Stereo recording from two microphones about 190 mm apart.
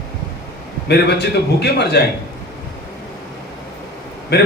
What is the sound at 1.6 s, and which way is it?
Speech, 60° left (ahead or behind).